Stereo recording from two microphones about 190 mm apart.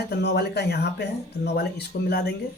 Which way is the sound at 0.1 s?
60° left (ahead or behind).